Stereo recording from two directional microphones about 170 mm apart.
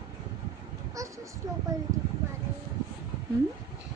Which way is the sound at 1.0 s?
20° right (ahead or behind).